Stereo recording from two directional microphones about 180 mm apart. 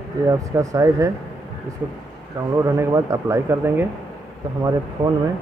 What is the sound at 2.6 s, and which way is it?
Speech, 15° right (ahead or behind).